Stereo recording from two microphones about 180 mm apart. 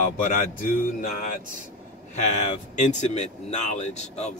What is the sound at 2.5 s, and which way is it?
Speech, 40° left (ahead or behind).